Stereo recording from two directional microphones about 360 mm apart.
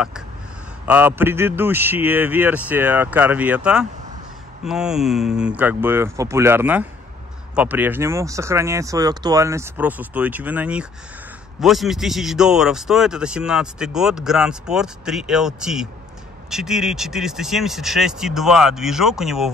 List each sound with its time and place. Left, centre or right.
0.8 s speech: centre